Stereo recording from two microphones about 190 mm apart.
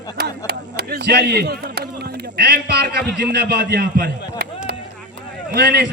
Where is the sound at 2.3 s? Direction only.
60° right (ahead or behind).